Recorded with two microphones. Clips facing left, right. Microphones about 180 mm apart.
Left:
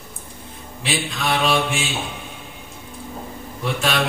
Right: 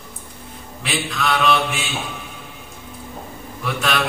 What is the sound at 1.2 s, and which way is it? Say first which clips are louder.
Mantra: right 2 dB; 30° left (ahead or behind).